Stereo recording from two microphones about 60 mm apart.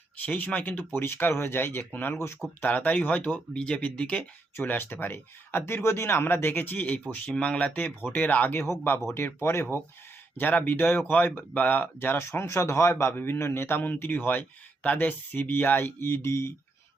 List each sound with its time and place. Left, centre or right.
0.3 s speech: left
0.9 s speech: left
3.5 s speech: centre
4.5 s speech: left
7.3 s speech: centre
9.1 s speech: left
10.3 s speech: left
11.9 s speech: left